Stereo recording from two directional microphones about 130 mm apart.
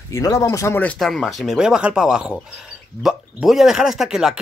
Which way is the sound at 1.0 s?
Centre (ahead or behind).